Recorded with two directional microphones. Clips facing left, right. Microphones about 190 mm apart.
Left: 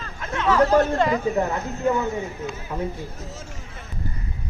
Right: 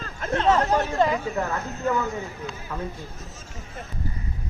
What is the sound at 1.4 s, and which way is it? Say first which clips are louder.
Speech: left 4 dB; 20° left (ahead or behind).